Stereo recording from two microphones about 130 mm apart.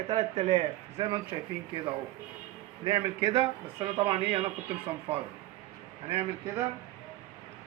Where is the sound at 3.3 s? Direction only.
40° right (ahead or behind).